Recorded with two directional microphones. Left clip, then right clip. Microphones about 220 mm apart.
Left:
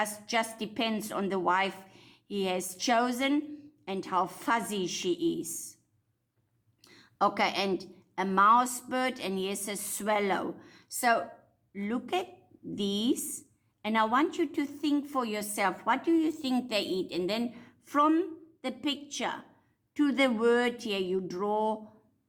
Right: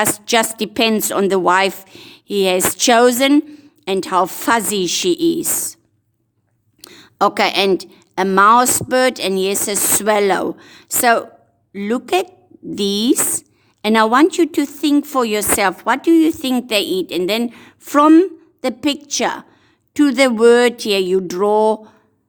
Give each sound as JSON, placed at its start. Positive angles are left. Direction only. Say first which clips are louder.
{"t": 0.0, "sound": "a woman's voice", "louder": "right 15 dB", "side_deg": -50}
{"t": 6.8, "sound": "a woman's voice", "louder": "right 12 dB", "side_deg": -50}